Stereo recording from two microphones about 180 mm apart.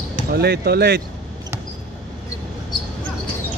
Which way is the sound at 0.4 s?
65° right (ahead or behind).